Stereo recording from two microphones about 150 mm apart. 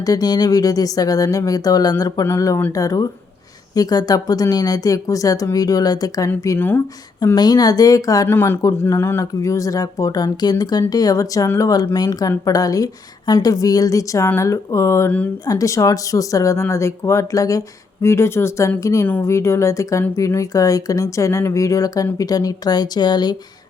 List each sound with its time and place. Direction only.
0.0 s speech: 25° left (ahead or behind)
7.2 s speech: 25° left (ahead or behind)